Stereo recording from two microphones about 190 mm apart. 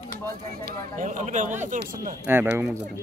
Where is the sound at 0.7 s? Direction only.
45° right (ahead or behind).